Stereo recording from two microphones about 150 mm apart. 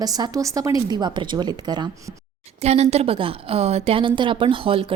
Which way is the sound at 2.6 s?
45° right (ahead or behind).